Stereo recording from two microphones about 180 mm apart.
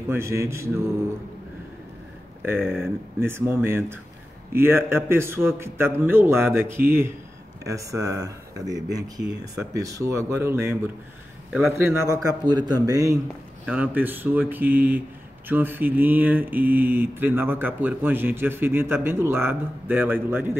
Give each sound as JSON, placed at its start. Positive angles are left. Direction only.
{"t": 0.1, "sound": "speech", "side_deg": -15}
{"t": 2.4, "sound": "speech", "side_deg": -15}